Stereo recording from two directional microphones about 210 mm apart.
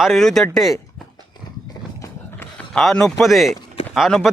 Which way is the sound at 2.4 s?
5° left (ahead or behind).